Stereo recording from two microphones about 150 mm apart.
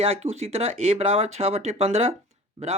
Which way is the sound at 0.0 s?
40° right (ahead or behind).